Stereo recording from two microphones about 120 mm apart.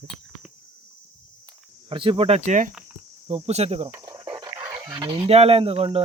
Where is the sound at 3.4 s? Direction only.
60° right (ahead or behind).